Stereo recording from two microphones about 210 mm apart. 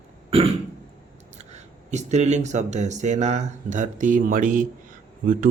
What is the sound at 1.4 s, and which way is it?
Speech, 35° right (ahead or behind).